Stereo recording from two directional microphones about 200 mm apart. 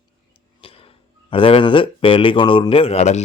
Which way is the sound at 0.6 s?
25° left (ahead or behind).